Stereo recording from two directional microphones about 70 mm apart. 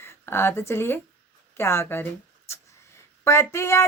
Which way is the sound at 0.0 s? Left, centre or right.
Left.